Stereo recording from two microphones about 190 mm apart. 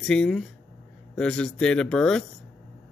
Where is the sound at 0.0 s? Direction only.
5° left (ahead or behind).